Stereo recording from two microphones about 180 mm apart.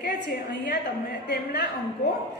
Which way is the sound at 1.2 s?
65° left (ahead or behind).